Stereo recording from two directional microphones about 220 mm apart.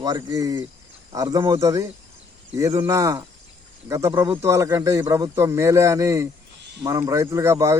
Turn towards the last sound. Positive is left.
turn(degrees=-10)  # may be behind; listen again after turning